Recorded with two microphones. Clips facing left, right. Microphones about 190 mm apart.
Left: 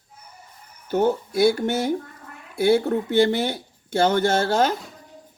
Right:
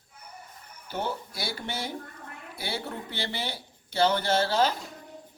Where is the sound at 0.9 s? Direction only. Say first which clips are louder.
Left 12 dB; 45° left (ahead or behind).